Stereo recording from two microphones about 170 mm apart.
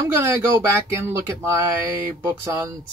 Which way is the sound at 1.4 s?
15° right (ahead or behind).